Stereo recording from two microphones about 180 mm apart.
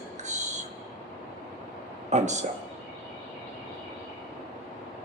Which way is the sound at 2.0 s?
40° right (ahead or behind).